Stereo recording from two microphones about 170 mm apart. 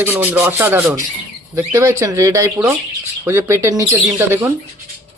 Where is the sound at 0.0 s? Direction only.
10° right (ahead or behind).